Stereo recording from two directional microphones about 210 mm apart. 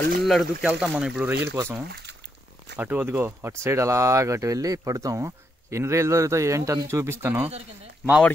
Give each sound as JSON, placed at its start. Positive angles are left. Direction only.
{"t": 0.2, "sound": "speech", "side_deg": 0}
{"t": 2.8, "sound": "speech", "side_deg": -10}